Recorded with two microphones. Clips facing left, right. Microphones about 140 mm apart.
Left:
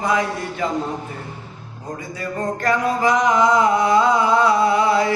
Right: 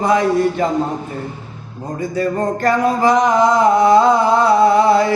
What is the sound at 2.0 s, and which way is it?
Music, 35° right (ahead or behind).